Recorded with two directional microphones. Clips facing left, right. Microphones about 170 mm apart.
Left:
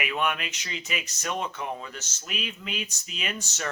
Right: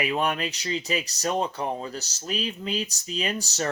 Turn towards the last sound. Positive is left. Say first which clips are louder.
# right 6 dB
turn(degrees=-35)  # may be behind; listen again after turning